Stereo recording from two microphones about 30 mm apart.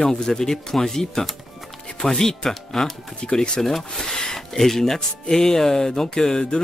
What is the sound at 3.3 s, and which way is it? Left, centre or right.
Speech, left.